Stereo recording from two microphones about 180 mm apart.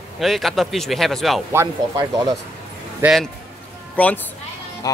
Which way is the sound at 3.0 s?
Centre (ahead or behind).